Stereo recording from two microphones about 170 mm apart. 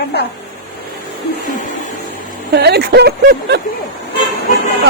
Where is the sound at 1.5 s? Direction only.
50° left (ahead or behind).